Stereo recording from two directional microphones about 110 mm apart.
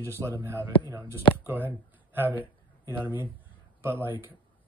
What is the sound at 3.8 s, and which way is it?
Speech, 20° right (ahead or behind).